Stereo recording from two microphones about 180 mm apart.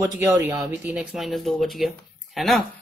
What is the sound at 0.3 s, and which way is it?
Speech, 10° right (ahead or behind).